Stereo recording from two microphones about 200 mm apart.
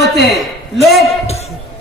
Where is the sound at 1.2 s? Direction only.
30° left (ahead or behind).